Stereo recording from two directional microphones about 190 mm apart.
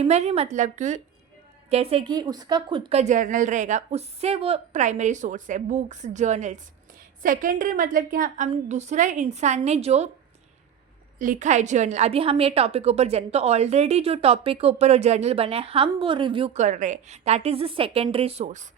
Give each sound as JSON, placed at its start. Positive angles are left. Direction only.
{"t": 0.0, "sound": "a woman's voice", "side_deg": -35}
{"t": 11.2, "sound": "a woman's voice", "side_deg": -40}